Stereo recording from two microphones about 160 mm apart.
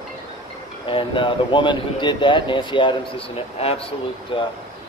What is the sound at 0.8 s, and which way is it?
Speech, 30° left (ahead or behind).